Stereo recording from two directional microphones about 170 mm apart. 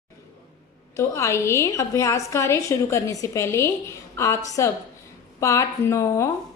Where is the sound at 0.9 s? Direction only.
15° left (ahead or behind).